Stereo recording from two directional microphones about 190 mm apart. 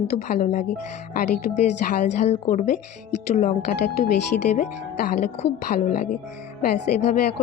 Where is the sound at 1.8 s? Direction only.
50° left (ahead or behind).